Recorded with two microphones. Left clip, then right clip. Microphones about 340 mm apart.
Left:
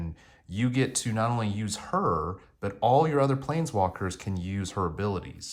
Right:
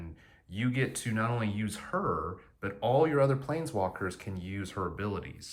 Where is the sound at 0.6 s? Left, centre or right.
Centre.